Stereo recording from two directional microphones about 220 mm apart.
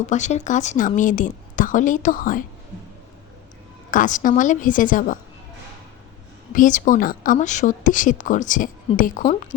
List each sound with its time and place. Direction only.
0.0 s speech: 35° left (ahead or behind)
3.9 s speech: 35° left (ahead or behind)
6.5 s a woman's voice: 35° left (ahead or behind)